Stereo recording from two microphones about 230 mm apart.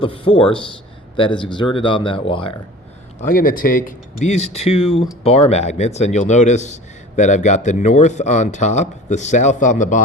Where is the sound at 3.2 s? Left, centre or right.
Left.